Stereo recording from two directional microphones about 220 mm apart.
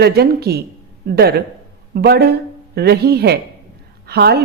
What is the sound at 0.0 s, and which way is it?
Speech, 45° right (ahead or behind).